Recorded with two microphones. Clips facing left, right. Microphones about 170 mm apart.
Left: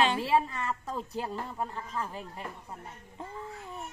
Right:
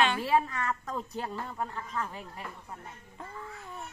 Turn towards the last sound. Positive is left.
turn(degrees=25)  # may be behind; listen again after turning